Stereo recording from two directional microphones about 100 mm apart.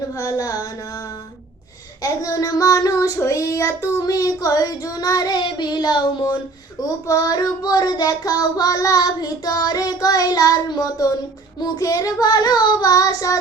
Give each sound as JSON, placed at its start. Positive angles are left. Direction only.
{"t": 0.2, "sound": "child singing", "side_deg": 35}
{"t": 2.0, "sound": "child singing", "side_deg": 35}
{"t": 7.1, "sound": "child singing", "side_deg": 35}